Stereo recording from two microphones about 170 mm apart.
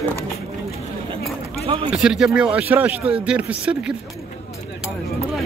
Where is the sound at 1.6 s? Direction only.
35° right (ahead or behind).